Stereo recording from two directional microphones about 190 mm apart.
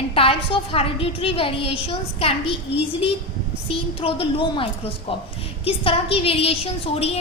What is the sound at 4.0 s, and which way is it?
A woman's voice, 30° left (ahead or behind).